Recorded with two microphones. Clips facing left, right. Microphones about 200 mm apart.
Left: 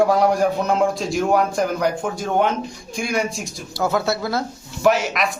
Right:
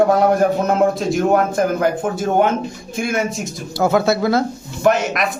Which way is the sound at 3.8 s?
55° right (ahead or behind).